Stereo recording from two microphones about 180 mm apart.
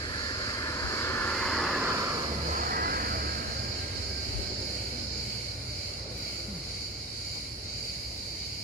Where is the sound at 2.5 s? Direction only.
55° right (ahead or behind).